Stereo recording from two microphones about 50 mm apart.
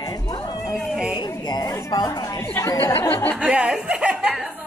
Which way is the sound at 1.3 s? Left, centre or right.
Left.